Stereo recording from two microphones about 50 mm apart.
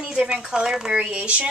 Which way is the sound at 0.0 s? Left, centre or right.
Centre.